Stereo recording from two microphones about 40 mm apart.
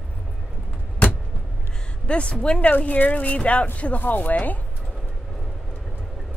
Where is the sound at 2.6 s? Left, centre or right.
Left.